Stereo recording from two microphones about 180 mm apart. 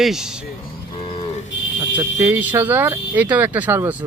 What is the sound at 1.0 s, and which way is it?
Livestock, 30° left (ahead or behind).